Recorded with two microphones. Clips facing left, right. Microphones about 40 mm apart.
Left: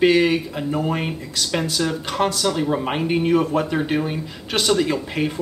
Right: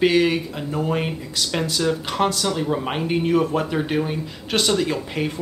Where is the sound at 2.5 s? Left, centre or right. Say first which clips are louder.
Left 2 dB; centre.